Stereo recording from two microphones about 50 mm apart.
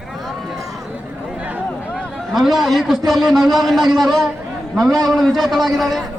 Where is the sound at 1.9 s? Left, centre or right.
Centre.